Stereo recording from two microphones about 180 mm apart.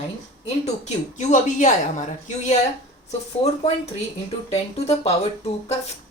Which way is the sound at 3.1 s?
35° left (ahead or behind).